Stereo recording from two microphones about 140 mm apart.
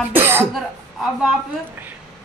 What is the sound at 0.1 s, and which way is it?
Cough, 15° right (ahead or behind).